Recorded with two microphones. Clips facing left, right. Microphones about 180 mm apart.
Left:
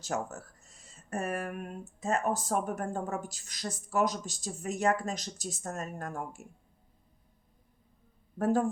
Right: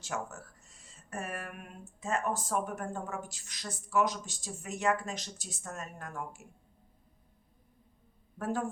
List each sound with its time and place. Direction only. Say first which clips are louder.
0.0 s speech: left 4 dB; 40° left (ahead or behind)
8.4 s speech: left 7 dB; 40° left (ahead or behind)